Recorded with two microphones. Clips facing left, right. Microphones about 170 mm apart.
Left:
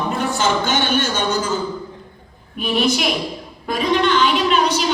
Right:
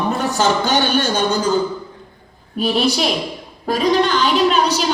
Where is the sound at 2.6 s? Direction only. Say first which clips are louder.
Right 2 dB; 35° right (ahead or behind).